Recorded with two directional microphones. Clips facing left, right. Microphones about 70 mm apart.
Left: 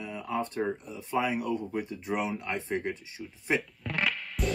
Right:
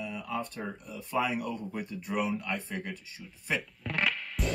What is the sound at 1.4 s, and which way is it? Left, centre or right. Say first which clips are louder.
Speech: left 4 dB; centre.